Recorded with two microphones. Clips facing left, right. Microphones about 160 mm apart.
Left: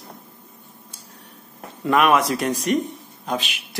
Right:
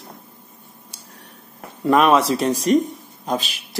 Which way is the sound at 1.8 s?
30° right (ahead or behind).